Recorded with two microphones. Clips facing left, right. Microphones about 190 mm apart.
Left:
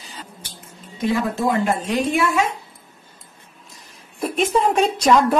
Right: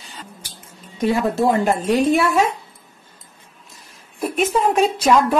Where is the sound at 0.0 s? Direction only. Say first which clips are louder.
Even; centre (ahead or behind).